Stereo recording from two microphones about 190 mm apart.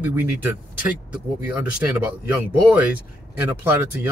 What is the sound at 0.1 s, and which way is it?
Speech, 10° right (ahead or behind).